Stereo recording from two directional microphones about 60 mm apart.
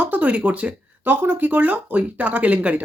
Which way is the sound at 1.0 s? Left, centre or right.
Right.